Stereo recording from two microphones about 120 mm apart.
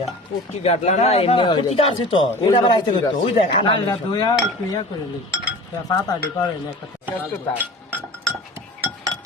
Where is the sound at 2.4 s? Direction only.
35° left (ahead or behind).